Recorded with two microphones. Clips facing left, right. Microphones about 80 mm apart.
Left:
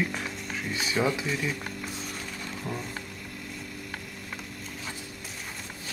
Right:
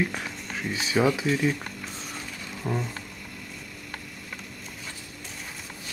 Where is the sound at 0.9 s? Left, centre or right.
Centre.